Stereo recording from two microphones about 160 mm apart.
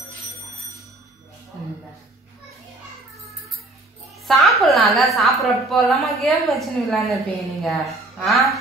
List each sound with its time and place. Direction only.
4.3 s a woman's voice: centre (ahead or behind)